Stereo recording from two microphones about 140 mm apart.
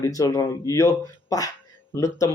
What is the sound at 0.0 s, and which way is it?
Speech, 25° left (ahead or behind).